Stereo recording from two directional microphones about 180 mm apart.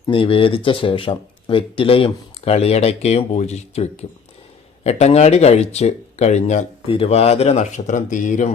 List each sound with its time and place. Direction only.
0.1 s speech: 30° left (ahead or behind)